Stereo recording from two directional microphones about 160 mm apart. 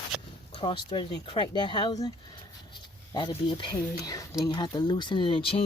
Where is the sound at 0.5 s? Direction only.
35° left (ahead or behind).